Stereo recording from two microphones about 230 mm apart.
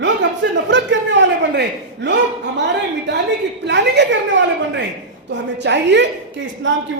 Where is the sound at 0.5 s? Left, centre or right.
Right.